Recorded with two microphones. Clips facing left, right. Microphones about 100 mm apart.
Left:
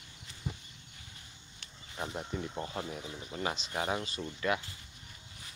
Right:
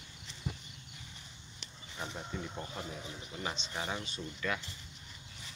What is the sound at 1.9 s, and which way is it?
Speech, 25° left (ahead or behind).